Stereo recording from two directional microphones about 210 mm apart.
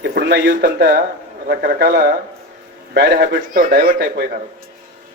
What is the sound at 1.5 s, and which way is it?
A man's voice, 45° right (ahead or behind).